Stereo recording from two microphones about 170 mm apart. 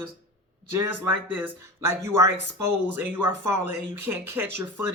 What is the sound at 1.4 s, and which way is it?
Speech, 15° right (ahead or behind).